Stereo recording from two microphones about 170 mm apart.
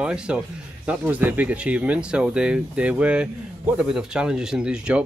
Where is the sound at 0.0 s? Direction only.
5° right (ahead or behind).